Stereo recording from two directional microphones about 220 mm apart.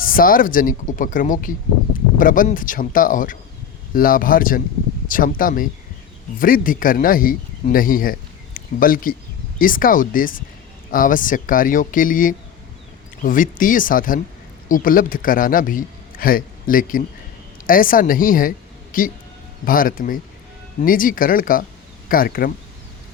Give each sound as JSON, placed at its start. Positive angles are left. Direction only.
{"t": 0.0, "sound": "a man's voice", "side_deg": 40}